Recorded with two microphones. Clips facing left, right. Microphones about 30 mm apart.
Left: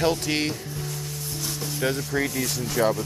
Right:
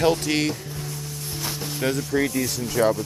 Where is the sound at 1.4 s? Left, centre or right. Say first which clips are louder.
Right 1 dB; right.